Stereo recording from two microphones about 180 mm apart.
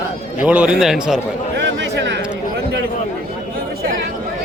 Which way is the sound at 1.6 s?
75° right (ahead or behind).